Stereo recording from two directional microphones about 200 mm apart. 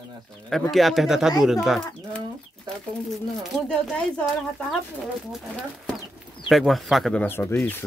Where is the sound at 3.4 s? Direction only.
5° left (ahead or behind).